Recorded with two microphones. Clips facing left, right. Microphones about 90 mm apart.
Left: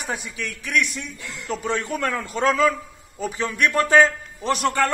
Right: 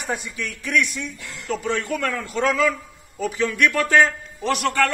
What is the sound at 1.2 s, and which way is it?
A man's voice, 25° left (ahead or behind).